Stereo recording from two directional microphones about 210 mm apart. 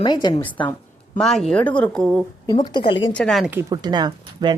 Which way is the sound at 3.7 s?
20° right (ahead or behind).